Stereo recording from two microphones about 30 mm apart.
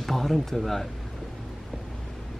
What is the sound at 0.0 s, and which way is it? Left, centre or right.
Speech, centre.